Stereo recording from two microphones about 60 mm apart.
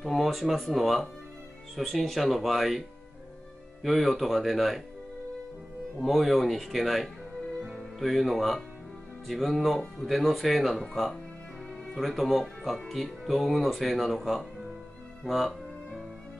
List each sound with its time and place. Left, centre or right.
0.0 s speech: centre
3.8 s speech: centre
5.9 s speech: centre
15.2 s music: centre